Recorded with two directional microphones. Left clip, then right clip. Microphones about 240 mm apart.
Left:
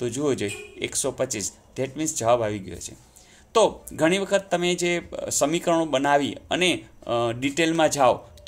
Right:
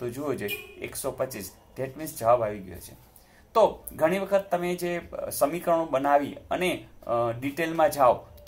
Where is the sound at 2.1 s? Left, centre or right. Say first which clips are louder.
Left 1 dB; left.